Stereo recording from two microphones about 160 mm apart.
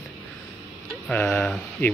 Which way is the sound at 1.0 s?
5° left (ahead or behind).